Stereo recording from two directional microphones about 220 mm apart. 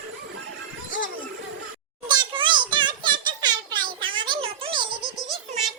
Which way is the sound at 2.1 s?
20° right (ahead or behind).